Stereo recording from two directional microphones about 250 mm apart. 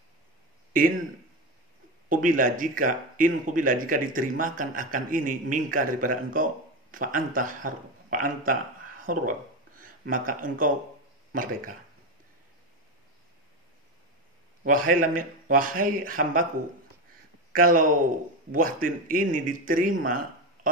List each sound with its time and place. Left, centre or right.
2.0 s a man's voice: right
14.6 s a man's voice: right
17.5 s a man's voice: right